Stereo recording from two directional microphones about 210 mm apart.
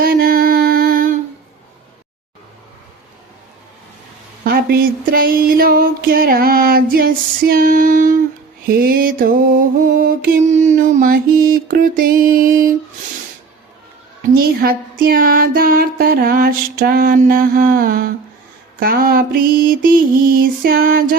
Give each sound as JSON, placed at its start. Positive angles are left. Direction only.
{"t": 0.0, "sound": "mantra", "side_deg": -45}
{"t": 4.4, "sound": "mantra", "side_deg": -50}
{"t": 14.3, "sound": "mantra", "side_deg": -45}